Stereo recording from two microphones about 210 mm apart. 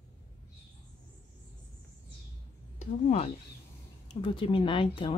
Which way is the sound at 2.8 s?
35° left (ahead or behind).